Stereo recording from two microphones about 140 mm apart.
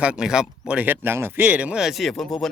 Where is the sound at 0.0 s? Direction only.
5° right (ahead or behind).